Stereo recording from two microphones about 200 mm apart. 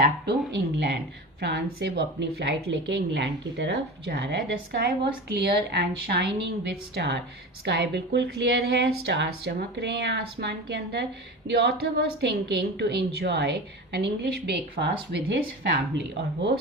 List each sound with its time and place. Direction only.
0.3 s a woman's voice: 60° right (ahead or behind)